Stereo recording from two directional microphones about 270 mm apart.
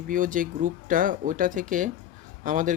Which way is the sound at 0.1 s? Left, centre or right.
Right.